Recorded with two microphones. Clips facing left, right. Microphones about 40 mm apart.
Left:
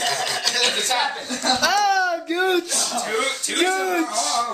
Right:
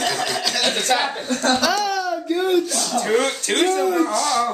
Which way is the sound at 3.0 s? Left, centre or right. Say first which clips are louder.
Right 5 dB; right.